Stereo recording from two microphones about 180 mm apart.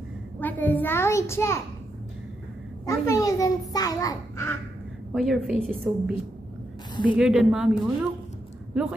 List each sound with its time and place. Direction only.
0.4 s a child's voice: 10° left (ahead or behind)
2.9 s a child's voice: 20° left (ahead or behind)
5.1 s a woman's voice: centre (ahead or behind)
8.7 s a woman's voice: centre (ahead or behind)